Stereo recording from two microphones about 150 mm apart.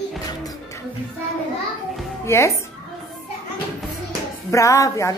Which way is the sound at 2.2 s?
20° left (ahead or behind).